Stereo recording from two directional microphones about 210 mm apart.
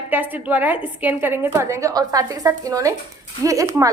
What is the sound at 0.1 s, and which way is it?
A woman's voice, 10° right (ahead or behind).